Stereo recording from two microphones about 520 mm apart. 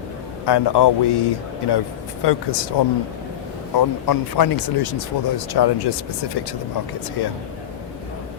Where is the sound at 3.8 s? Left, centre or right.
Left.